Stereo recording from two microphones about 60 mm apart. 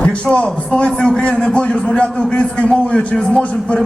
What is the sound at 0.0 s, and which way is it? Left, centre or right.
A man's voice, centre.